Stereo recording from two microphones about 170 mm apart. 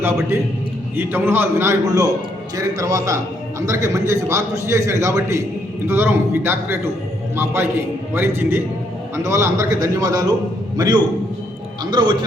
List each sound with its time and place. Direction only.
0.0 s a man's voice: 15° right (ahead or behind)